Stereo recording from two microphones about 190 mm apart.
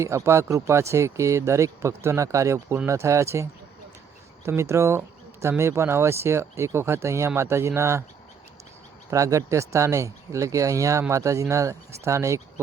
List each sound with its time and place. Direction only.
0.0 s speech: 15° right (ahead or behind)
4.4 s speech: 15° right (ahead or behind)
9.0 s speech: 15° right (ahead or behind)